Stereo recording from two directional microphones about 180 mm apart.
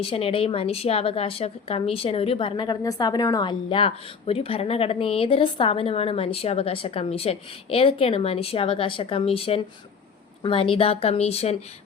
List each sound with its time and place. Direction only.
0.0 s a woman's voice: 30° left (ahead or behind)